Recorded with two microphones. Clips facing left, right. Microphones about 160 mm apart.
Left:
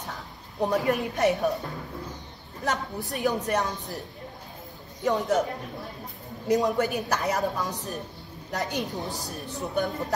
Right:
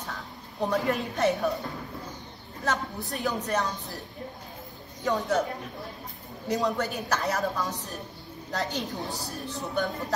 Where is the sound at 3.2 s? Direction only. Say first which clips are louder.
Left 3 dB; 15° left (ahead or behind).